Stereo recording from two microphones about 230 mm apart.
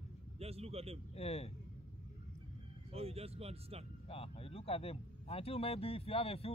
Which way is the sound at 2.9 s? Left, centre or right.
Right.